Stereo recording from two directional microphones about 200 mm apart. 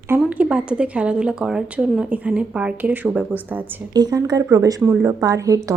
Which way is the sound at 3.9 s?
20° right (ahead or behind).